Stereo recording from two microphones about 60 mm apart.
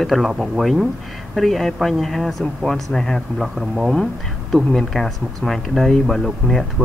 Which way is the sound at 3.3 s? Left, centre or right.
Centre.